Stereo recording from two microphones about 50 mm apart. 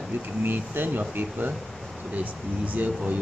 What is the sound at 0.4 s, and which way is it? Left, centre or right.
Speech, right.